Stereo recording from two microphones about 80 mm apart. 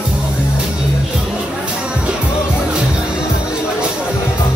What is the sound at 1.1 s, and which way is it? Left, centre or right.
Music, centre.